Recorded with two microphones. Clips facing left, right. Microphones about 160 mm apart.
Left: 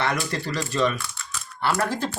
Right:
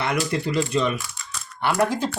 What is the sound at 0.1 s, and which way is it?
Speech, 15° right (ahead or behind).